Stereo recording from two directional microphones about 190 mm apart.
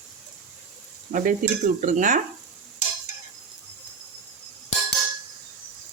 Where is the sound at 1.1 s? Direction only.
45° right (ahead or behind).